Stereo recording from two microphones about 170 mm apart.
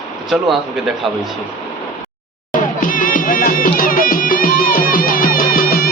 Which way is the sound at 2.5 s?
50° left (ahead or behind).